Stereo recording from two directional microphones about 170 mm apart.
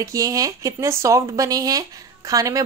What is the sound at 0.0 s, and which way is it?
Speech, 20° right (ahead or behind).